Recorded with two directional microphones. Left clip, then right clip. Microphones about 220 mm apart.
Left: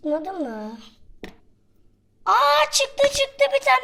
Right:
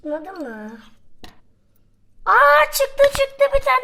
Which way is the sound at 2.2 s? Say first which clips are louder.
Right 4 dB; 10° right (ahead or behind).